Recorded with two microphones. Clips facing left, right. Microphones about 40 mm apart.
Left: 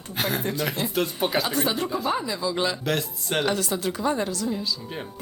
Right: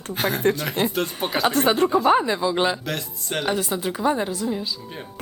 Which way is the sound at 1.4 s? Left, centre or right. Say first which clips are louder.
Right 7 dB; right.